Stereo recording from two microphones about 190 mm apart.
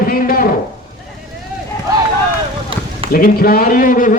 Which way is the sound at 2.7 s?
30° right (ahead or behind).